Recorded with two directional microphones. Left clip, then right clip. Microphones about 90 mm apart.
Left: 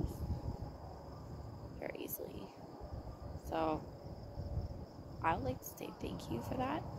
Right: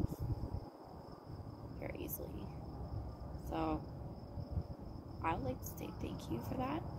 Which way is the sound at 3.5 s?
25° left (ahead or behind).